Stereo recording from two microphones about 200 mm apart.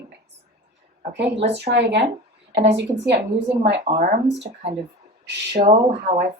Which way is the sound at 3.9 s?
40° right (ahead or behind).